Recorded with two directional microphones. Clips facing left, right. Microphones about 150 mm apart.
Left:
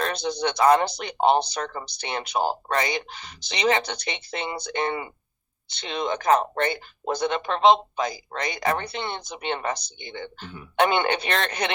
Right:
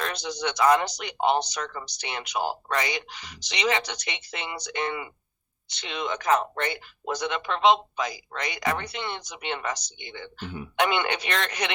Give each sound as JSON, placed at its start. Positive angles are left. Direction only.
{"t": 0.0, "sound": "speech", "side_deg": 30}